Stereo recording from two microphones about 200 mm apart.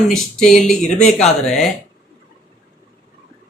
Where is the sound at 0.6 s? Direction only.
35° left (ahead or behind).